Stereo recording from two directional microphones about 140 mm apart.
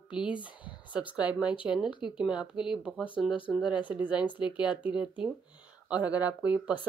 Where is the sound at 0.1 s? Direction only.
5° right (ahead or behind).